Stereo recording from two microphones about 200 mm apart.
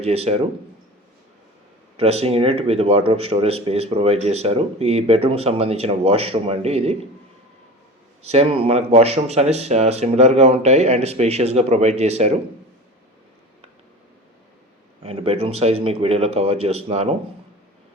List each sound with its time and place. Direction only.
0.0 s speech: 30° right (ahead or behind)
2.0 s speech: 30° right (ahead or behind)
8.3 s speech: 30° right (ahead or behind)
15.0 s speech: 30° right (ahead or behind)